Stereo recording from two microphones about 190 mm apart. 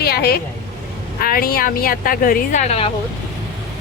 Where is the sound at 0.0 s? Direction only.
55° left (ahead or behind).